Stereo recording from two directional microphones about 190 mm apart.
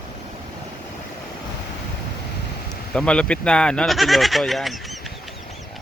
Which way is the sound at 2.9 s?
5° left (ahead or behind).